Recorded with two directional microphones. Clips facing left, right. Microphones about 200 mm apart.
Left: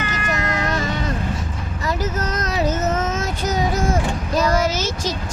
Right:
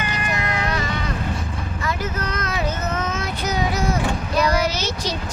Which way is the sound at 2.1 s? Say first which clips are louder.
Left 3 dB; 40° left (ahead or behind).